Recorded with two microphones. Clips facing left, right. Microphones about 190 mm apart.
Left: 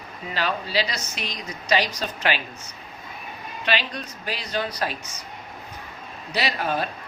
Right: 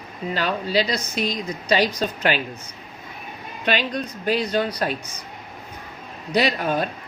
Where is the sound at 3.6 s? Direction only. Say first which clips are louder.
Right 4 dB; 45° right (ahead or behind).